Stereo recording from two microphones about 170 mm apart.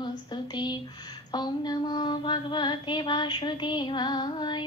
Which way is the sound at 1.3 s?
25° left (ahead or behind).